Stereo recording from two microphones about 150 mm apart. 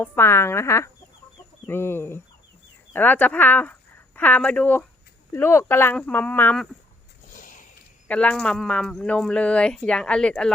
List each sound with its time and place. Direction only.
0.0 s speech: 15° left (ahead or behind)
7.3 s a sound: 60° left (ahead or behind)
8.0 s a woman's voice: 5° left (ahead or behind)